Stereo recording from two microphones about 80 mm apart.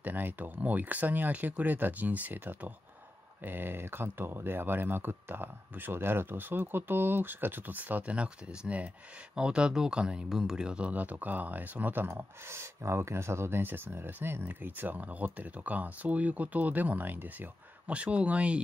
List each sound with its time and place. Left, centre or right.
0.0 s speech: right